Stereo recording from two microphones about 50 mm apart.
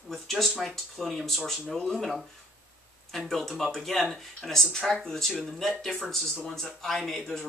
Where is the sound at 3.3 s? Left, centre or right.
Centre.